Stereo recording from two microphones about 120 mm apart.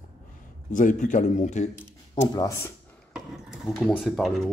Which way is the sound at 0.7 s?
90° left.